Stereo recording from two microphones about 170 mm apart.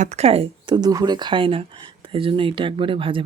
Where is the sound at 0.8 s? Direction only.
20° right (ahead or behind).